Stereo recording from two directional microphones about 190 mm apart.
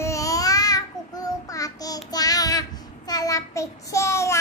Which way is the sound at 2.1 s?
20° left (ahead or behind).